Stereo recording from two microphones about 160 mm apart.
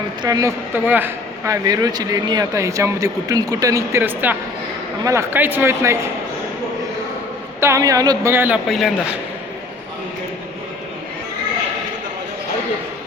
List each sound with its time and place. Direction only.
0.2 s speech: 20° right (ahead or behind)
7.6 s speech: 20° right (ahead or behind)
8.6 s speech: centre (ahead or behind)